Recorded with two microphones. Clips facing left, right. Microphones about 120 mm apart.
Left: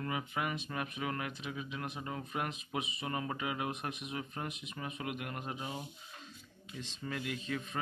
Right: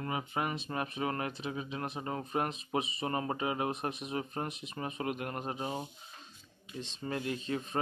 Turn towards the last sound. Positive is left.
turn(degrees=-30)  # may be behind; listen again after turning